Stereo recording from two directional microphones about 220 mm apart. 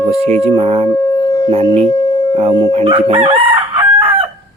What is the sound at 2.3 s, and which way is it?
Chicken, 20° right (ahead or behind).